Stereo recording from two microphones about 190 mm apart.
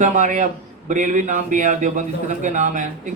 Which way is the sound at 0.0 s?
40° right (ahead or behind).